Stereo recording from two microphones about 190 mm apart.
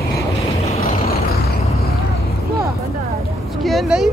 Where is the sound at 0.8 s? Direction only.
50° left (ahead or behind).